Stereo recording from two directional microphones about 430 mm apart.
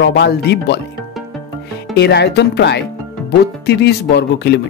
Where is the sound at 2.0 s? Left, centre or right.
Left.